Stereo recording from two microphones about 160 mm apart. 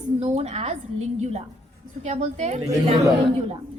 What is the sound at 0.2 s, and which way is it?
A woman's voice, 45° right (ahead or behind).